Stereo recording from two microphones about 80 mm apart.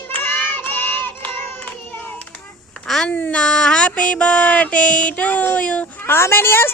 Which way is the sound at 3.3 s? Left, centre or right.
Centre.